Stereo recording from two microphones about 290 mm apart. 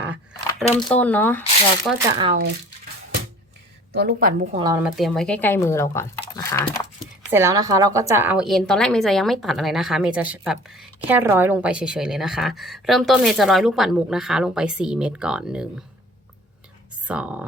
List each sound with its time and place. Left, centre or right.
0.9 s speech: centre
2.0 s speech: centre
3.9 s a woman's voice: right
4.6 s speech: centre
4.9 s speech: centre
7.3 s speech: centre
17.1 s speech: centre